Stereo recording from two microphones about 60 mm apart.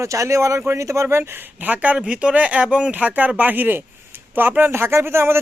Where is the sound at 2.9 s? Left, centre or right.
Right.